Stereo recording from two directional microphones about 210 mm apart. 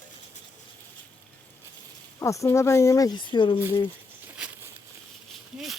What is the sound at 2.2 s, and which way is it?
Speech, 15° left (ahead or behind).